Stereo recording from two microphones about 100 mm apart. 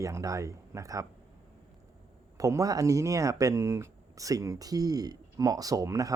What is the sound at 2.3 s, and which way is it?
Speech, 35° right (ahead or behind).